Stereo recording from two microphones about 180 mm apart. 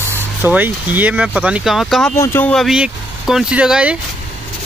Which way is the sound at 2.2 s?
10° left (ahead or behind).